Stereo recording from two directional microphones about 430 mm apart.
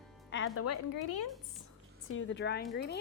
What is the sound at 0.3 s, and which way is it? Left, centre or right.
Music, left.